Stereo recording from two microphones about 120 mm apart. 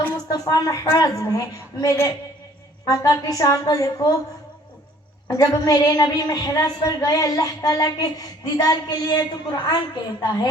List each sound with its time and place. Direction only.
0.3 s a woman's voice: 30° left (ahead or behind)
5.3 s a woman's voice: 30° left (ahead or behind)